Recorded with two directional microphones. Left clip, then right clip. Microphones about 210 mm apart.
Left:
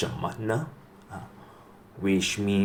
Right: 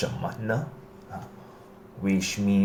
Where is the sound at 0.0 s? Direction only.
25° left (ahead or behind).